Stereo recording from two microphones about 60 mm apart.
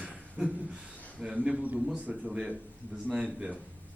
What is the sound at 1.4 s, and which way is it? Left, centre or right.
Speech, right.